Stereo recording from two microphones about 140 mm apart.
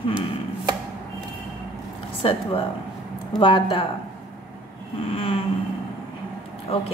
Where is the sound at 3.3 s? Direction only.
35° left (ahead or behind).